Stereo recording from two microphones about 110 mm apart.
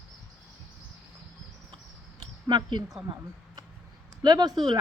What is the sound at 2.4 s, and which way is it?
Speech, 40° right (ahead or behind).